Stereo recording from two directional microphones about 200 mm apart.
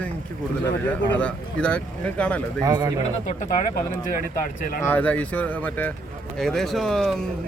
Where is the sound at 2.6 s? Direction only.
20° right (ahead or behind).